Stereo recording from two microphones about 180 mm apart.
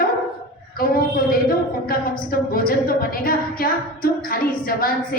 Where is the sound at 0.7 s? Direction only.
55° left (ahead or behind).